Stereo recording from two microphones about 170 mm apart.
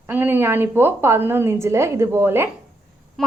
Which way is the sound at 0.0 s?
10° right (ahead or behind).